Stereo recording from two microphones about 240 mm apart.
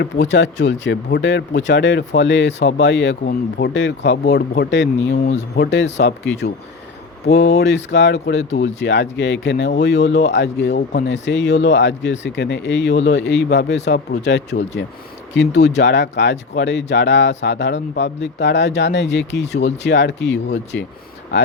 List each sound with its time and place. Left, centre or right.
0.0 s speech: left
7.3 s speech: left